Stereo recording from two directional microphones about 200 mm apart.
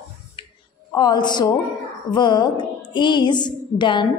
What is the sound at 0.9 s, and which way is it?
Speech, 20° left (ahead or behind).